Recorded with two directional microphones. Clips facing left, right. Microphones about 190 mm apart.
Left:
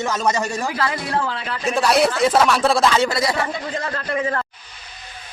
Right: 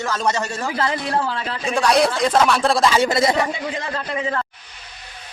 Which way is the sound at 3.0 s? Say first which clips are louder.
Right 2 dB; 20° right (ahead or behind).